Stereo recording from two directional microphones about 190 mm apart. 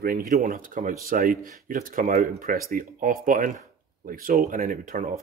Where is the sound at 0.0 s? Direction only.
45° right (ahead or behind).